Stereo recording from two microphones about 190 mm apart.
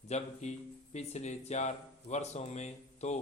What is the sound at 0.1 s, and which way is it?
Speech, 35° left (ahead or behind).